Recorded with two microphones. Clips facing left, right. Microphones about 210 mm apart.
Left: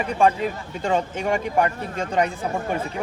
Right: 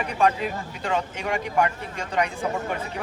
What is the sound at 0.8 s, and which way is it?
Speech, 45° left (ahead or behind).